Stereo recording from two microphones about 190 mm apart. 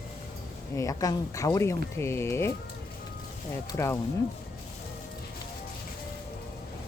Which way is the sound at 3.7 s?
15° left (ahead or behind).